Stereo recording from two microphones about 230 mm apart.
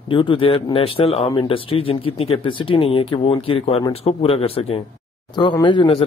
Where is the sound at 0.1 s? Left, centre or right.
Left.